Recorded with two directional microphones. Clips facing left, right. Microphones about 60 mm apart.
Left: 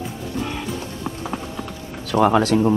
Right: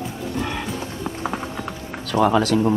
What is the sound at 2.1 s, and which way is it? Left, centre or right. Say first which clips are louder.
Speech: left 1 dB; left.